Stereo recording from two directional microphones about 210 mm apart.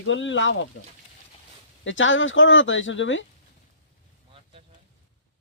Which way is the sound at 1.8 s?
65° left (ahead or behind).